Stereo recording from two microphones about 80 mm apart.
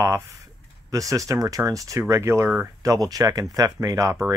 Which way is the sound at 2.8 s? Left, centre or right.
Right.